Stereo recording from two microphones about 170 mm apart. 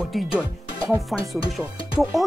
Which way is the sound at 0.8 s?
20° right (ahead or behind).